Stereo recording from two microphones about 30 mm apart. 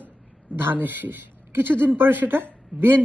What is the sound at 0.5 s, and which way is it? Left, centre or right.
A woman's voice, right.